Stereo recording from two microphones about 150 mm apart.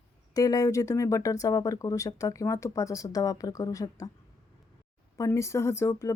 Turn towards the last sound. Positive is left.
turn(degrees=20)  # may be behind; listen again after turning